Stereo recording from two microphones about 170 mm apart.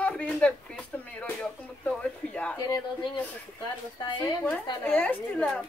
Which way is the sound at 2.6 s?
25° left (ahead or behind).